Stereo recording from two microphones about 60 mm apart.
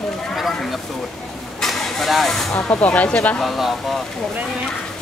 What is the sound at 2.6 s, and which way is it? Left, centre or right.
Speech, left.